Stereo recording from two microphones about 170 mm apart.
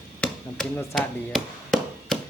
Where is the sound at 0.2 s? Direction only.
5° left (ahead or behind).